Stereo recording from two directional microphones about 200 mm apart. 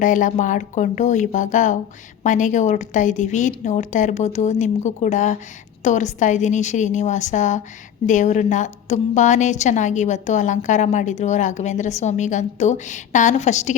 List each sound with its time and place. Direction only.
0.0 s a woman's voice: 40° left (ahead or behind)